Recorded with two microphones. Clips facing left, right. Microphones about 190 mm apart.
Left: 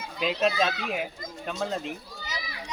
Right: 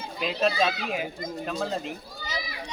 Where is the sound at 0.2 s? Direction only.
Centre (ahead or behind).